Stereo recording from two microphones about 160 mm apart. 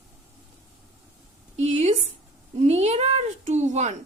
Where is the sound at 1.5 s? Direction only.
45° right (ahead or behind).